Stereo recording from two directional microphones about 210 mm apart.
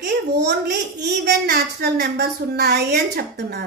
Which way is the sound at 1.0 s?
50° right (ahead or behind).